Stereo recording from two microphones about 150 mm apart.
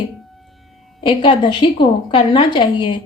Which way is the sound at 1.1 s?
35° left (ahead or behind).